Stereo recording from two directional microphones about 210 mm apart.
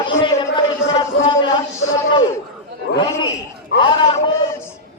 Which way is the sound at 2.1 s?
20° left (ahead or behind).